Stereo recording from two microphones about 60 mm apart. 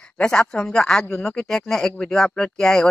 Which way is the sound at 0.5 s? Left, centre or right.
Centre.